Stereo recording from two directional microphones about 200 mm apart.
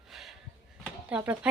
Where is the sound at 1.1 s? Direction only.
5° right (ahead or behind).